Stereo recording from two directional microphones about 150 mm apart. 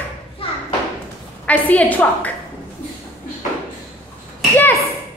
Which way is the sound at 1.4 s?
10° left (ahead or behind).